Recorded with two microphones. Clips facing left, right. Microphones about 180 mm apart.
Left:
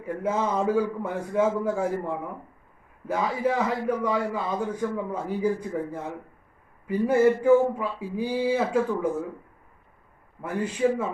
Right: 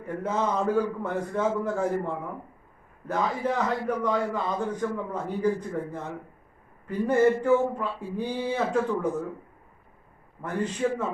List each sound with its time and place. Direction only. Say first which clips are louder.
0.0 s a man's voice: left 1 dB; 10° left (ahead or behind)
3.1 s a man's voice: left 2 dB; 10° left (ahead or behind)
10.4 s a man's voice: left 3 dB; 10° left (ahead or behind)